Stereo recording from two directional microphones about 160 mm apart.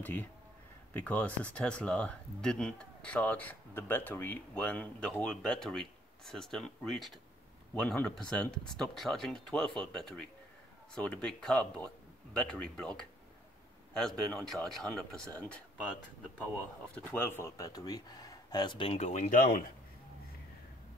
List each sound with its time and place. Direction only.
0.0 s speech: 10° left (ahead or behind)
16.9 s speech: 15° left (ahead or behind); by 19.6 s 55° left (ahead or behind)